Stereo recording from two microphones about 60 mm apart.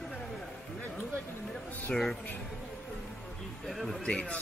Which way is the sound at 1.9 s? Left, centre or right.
Centre.